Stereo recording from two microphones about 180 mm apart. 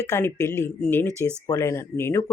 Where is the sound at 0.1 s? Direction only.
15° left (ahead or behind).